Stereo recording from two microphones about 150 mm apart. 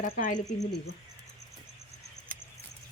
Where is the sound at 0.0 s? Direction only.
60° left (ahead or behind).